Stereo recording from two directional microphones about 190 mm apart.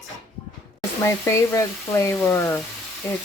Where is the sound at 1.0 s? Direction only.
15° left (ahead or behind).